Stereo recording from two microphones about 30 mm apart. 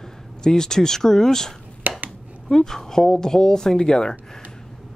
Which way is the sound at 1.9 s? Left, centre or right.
Right.